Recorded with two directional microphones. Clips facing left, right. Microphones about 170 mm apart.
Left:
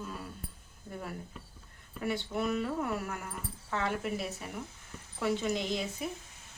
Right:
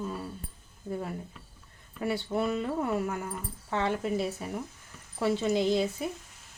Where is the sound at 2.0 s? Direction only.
35° right (ahead or behind).